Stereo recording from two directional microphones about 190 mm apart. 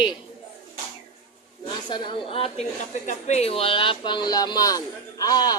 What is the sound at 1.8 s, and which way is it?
A woman's voice, 25° left (ahead or behind).